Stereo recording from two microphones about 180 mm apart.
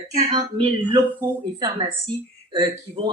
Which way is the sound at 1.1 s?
15° right (ahead or behind).